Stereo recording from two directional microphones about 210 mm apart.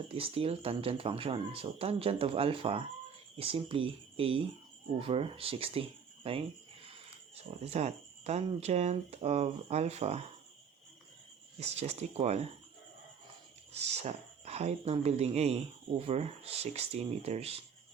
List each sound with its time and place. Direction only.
0.1 s speech: 25° right (ahead or behind)
7.6 s speech: 30° right (ahead or behind)
11.6 s speech: 30° right (ahead or behind)
13.7 s speech: 30° right (ahead or behind)